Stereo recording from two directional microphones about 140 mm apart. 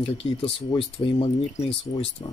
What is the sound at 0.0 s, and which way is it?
Speech, 45° left (ahead or behind).